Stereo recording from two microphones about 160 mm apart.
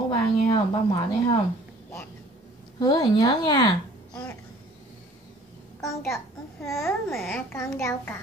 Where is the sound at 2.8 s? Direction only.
25° left (ahead or behind).